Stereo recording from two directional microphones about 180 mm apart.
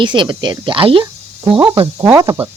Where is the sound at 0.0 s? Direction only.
25° right (ahead or behind).